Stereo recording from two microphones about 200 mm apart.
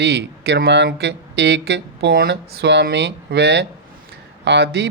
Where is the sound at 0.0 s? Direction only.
60° right (ahead or behind).